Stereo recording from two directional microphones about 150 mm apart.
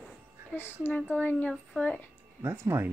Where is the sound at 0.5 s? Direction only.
15° left (ahead or behind).